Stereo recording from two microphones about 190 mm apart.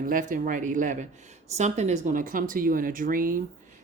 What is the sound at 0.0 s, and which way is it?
Speech, 45° right (ahead or behind).